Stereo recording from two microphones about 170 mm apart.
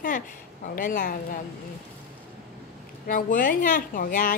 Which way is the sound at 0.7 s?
55° left (ahead or behind).